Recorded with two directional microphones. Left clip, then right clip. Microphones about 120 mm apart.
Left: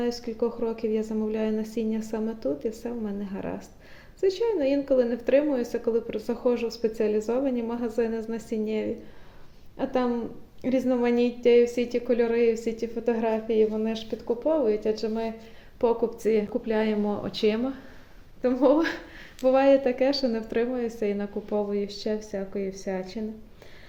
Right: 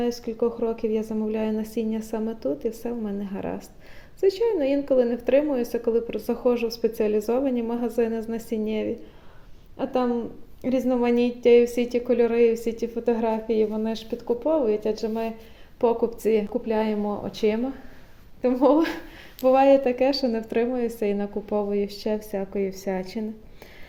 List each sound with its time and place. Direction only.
0.0 s a woman's voice: 30° right (ahead or behind); by 17.6 s 10° right (ahead or behind)
18.4 s a woman's voice: 40° right (ahead or behind)
19.4 s a woman's voice: 30° right (ahead or behind)